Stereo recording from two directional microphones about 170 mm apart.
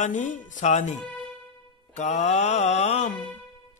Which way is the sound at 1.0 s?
30° right (ahead or behind).